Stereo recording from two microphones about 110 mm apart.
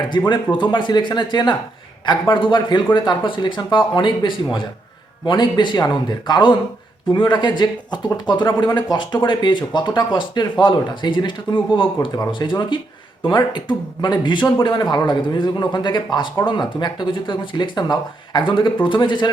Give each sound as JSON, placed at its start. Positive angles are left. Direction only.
{"t": 0.1, "sound": "speech", "side_deg": 40}